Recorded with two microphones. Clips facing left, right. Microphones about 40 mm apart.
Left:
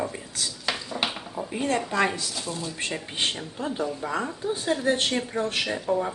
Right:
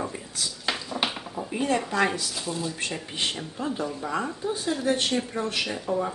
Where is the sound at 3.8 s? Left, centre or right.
Centre.